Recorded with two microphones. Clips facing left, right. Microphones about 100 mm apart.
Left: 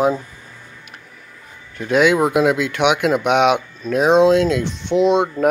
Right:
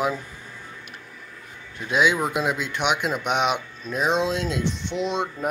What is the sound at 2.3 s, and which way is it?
Speech, 90° left.